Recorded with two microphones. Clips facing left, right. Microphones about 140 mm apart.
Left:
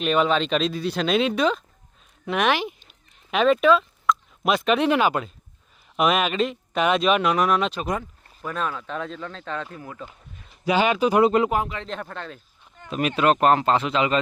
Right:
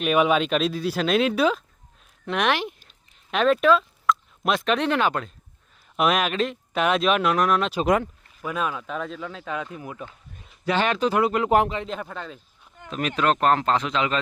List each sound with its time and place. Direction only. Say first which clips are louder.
0.0 s speech: right 1 dB; 10° right (ahead or behind)
10.7 s speech: left 2 dB; 10° left (ahead or behind)
11.2 s speech: left 7 dB; 25° left (ahead or behind)
11.9 s speech: even; 5° right (ahead or behind)